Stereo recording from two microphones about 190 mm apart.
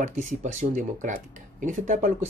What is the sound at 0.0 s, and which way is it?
Speech, 40° right (ahead or behind).